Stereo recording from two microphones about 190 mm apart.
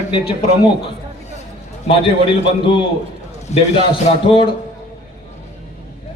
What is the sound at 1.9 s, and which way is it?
A man's voice, 30° left (ahead or behind).